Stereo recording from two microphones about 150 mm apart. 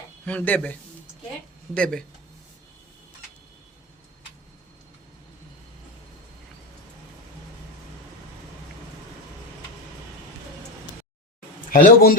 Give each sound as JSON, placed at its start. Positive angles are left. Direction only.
{"t": 0.3, "sound": "speech", "side_deg": 10}
{"t": 11.7, "sound": "speech", "side_deg": 70}